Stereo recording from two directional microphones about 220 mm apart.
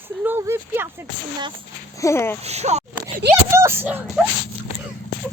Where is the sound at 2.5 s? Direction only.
30° right (ahead or behind).